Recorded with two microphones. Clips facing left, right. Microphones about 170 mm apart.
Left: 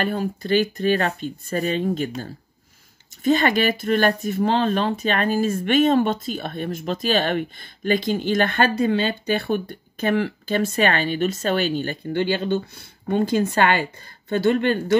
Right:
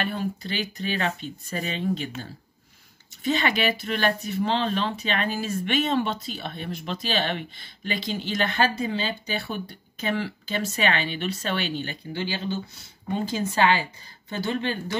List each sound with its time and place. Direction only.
0.0 s speech: 45° left (ahead or behind)
3.3 s speech: 45° left (ahead or behind)